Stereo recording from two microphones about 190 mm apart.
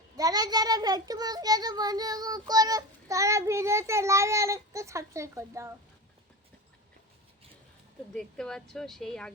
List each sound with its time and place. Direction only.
0.2 s a child's voice: 20° right (ahead or behind)
8.1 s speech: centre (ahead or behind)